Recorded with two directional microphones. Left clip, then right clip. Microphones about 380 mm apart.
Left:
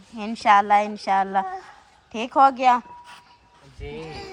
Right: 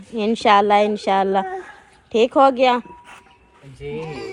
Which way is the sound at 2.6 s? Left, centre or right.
Centre.